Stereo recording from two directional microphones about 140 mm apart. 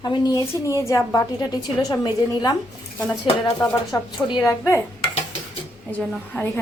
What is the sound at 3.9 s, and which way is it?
Speech, 20° left (ahead or behind).